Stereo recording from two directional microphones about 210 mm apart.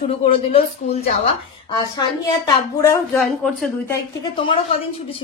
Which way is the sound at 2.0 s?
15° left (ahead or behind).